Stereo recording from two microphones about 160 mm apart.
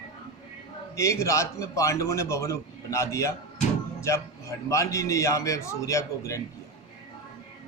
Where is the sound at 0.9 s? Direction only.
20° left (ahead or behind).